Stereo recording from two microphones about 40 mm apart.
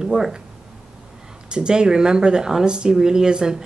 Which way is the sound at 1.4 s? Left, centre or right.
Right.